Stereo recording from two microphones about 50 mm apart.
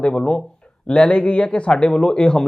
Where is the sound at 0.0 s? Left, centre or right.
Centre.